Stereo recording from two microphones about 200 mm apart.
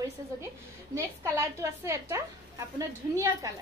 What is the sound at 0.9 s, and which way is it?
A woman's voice, 15° right (ahead or behind).